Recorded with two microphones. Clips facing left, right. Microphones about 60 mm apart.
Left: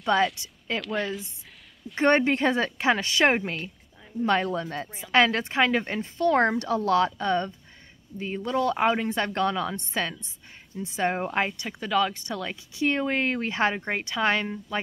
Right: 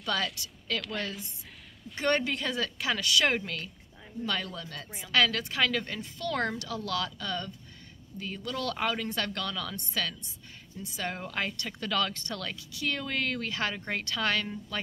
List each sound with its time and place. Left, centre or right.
0.1 s a woman's voice: left
0.7 s speech: centre
2.0 s a woman's voice: left; by 12.5 s centre
12.7 s a woman's voice: left